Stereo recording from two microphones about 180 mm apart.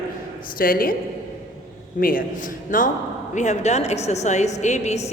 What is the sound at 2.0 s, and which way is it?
A man's voice, 50° left (ahead or behind).